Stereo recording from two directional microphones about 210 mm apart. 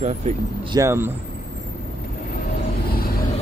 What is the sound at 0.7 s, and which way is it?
Speech, 10° right (ahead or behind).